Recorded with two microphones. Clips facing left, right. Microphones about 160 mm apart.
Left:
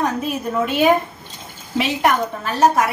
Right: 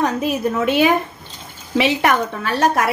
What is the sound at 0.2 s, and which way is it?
A woman's voice, 75° right (ahead or behind).